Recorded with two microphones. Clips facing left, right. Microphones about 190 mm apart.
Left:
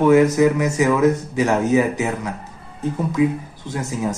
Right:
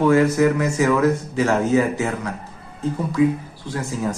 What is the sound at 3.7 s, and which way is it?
Speech, 20° left (ahead or behind).